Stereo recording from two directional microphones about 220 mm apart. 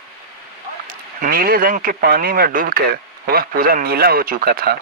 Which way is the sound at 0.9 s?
40° right (ahead or behind).